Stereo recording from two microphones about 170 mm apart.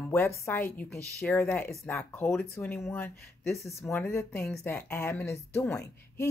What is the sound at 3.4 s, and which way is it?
Speech, centre (ahead or behind).